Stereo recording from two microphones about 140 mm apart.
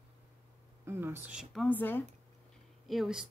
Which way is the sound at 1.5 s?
10° left (ahead or behind).